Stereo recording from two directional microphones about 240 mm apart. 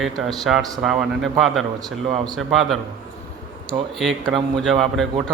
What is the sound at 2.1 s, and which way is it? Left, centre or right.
Speech, right.